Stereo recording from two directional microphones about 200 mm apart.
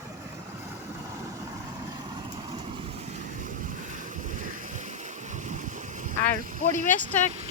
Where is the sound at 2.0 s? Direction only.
20° right (ahead or behind).